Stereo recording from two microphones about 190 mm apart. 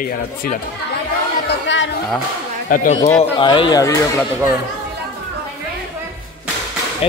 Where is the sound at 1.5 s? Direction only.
75° left (ahead or behind).